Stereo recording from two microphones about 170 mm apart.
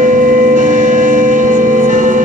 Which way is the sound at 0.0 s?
50° right (ahead or behind).